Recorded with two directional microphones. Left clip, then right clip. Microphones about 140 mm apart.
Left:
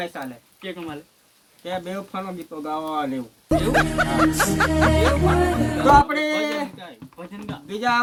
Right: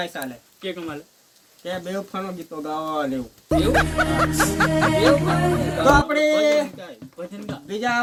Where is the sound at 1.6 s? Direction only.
20° right (ahead or behind).